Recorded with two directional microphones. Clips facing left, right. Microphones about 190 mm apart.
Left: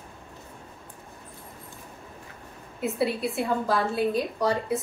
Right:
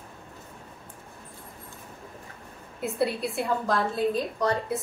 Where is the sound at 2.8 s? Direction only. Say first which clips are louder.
Left 1 dB; centre (ahead or behind).